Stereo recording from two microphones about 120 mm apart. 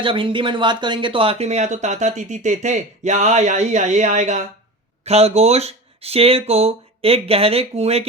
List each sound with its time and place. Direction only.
0.0 s speech: 45° right (ahead or behind); by 4.4 s 80° right
5.0 s speech: 60° right (ahead or behind)